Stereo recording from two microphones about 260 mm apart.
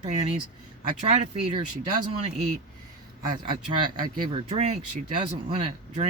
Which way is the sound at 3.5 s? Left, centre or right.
Centre.